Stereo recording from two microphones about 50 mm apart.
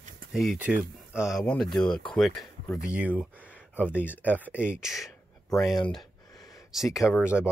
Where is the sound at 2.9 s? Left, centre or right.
Right.